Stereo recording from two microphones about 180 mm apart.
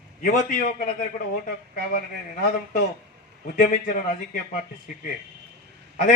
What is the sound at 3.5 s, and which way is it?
A man's voice, 45° left (ahead or behind).